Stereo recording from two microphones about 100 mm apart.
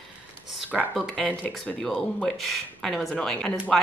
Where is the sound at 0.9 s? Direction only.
10° left (ahead or behind).